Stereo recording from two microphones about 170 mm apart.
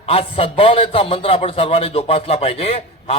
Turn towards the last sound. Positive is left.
turn(degrees=35)  # may be behind; listen again after turning